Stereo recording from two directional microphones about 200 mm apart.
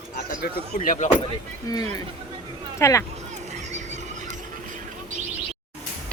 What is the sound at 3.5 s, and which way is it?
Horse, 35° right (ahead or behind).